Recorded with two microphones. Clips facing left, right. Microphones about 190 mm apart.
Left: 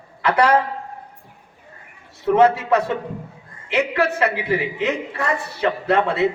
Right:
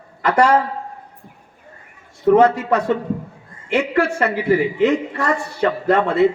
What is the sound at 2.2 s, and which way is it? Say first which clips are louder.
A man's voice: right 2 dB; 50° right (ahead or behind).